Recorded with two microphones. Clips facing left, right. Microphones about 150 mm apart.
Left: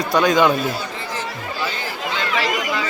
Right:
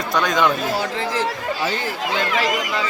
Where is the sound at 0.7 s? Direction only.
90° right.